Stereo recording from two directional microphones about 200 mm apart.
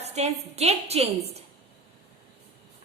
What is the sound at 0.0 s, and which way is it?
A woman's voice, 30° right (ahead or behind).